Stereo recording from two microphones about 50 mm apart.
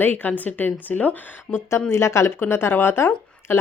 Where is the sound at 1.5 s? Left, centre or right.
Left.